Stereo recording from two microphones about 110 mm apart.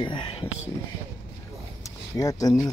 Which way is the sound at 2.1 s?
30° left (ahead or behind).